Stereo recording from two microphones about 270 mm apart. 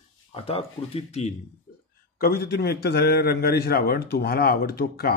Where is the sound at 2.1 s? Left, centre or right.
Left.